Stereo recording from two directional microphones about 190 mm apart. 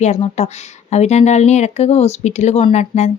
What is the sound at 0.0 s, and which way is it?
A woman's voice, 35° left (ahead or behind).